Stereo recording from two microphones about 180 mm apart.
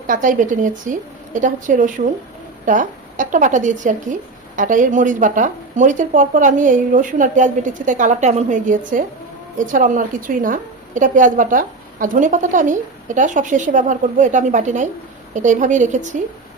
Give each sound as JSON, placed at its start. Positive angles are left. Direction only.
{"t": 0.1, "sound": "a woman's voice", "side_deg": -45}